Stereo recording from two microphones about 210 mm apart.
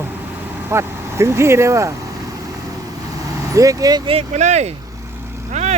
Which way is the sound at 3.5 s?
15° right (ahead or behind).